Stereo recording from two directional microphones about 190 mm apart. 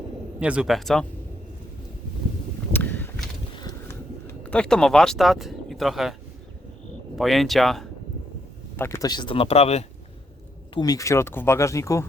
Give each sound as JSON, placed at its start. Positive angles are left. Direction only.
{"t": 0.3, "sound": "speech", "side_deg": -5}
{"t": 2.7, "sound": "a sound", "side_deg": 10}
{"t": 7.2, "sound": "speech", "side_deg": 0}
{"t": 8.7, "sound": "speech", "side_deg": 10}
{"t": 10.8, "sound": "speech", "side_deg": 20}